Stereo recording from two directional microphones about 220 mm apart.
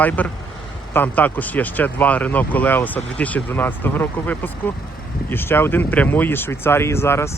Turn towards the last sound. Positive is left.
turn(degrees=10)  # may be behind; listen again after turning